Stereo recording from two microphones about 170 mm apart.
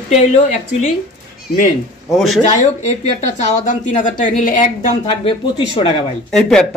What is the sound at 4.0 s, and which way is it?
A woman's voice, 50° left (ahead or behind).